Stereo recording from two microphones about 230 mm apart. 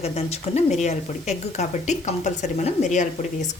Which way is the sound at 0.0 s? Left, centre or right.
Left.